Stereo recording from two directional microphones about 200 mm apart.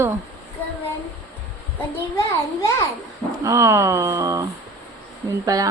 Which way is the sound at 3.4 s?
15° right (ahead or behind).